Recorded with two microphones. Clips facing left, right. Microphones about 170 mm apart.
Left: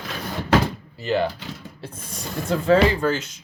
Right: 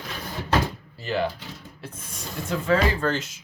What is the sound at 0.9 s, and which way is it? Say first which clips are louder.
Speech: left 5 dB; 20° left (ahead or behind).